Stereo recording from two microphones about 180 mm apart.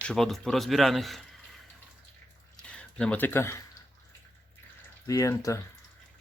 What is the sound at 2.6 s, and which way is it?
Speech, 5° left (ahead or behind).